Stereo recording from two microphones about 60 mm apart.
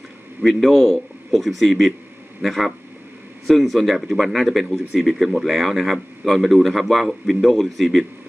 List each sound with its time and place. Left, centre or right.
0.4 s speech: centre